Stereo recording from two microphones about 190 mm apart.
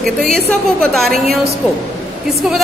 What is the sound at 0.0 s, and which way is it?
A woman's voice, centre (ahead or behind).